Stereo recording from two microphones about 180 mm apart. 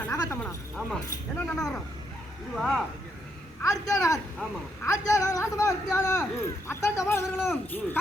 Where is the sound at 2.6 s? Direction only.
Centre (ahead or behind).